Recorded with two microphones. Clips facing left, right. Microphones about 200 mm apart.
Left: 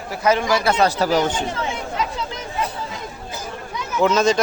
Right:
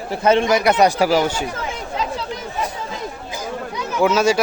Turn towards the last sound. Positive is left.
turn(degrees=-10)  # may be behind; listen again after turning